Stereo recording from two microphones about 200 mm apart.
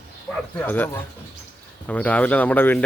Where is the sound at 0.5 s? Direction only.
10° left (ahead or behind).